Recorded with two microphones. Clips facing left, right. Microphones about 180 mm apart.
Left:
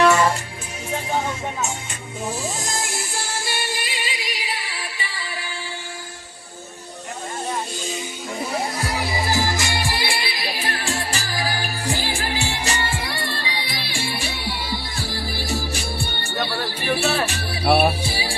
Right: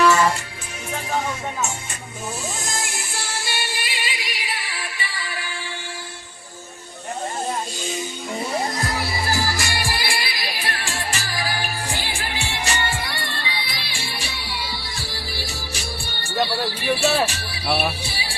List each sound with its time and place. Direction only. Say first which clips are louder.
3.4 s music: left 2 dB; 40° left (ahead or behind)
8.9 s music: left 1 dB; 15° left (ahead or behind); by 13.8 s 35° left (ahead or behind)
13.8 s music: left 5 dB; 50° left (ahead or behind)